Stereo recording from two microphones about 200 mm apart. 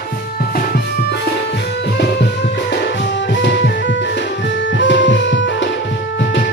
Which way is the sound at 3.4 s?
60° left (ahead or behind).